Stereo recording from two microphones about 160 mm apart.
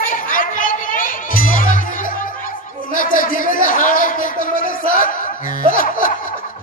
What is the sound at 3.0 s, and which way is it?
Speech, 60° left (ahead or behind).